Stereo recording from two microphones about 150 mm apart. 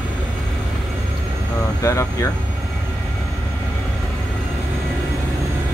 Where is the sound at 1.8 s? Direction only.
20° left (ahead or behind).